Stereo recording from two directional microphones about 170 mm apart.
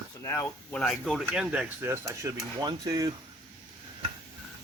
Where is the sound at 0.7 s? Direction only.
5° left (ahead or behind); by 3.1 s 20° right (ahead or behind).